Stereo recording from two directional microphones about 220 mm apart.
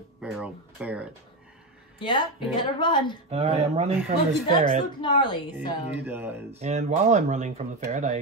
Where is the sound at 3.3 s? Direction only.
30° right (ahead or behind).